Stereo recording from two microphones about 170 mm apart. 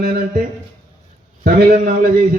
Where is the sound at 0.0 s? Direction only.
65° right (ahead or behind).